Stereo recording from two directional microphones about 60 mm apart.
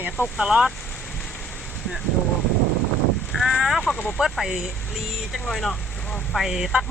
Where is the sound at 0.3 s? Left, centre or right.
Centre.